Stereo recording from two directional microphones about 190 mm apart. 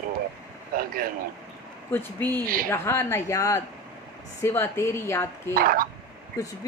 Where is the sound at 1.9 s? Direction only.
10° left (ahead or behind).